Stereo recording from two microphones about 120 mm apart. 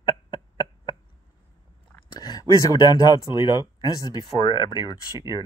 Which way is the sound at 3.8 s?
30° left (ahead or behind).